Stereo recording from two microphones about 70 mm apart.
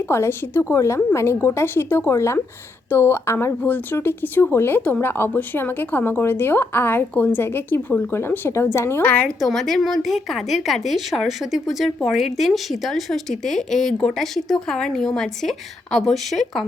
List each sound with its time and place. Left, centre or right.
0.1 s a woman's voice: left
9.0 s a woman's voice: centre
9.4 s speech: centre